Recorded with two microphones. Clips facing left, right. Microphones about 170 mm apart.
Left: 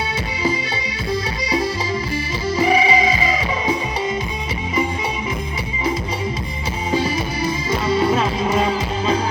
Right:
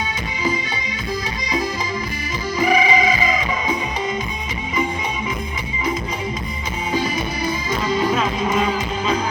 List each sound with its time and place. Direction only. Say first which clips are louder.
2.6 s music: left 1 dB; 30° left (ahead or behind)
6.9 s music: left 2 dB; 30° left (ahead or behind)